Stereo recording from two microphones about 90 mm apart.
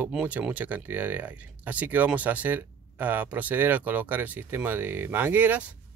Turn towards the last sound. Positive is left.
turn(degrees=-20)  # may be behind; listen again after turning